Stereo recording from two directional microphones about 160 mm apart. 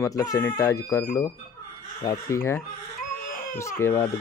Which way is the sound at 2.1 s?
20° left (ahead or behind).